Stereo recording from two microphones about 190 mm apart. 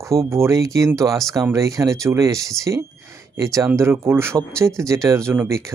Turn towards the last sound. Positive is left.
turn(degrees=-15)  # may be behind; listen again after turning